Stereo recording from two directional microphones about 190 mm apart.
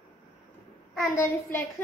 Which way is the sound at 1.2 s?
15° left (ahead or behind).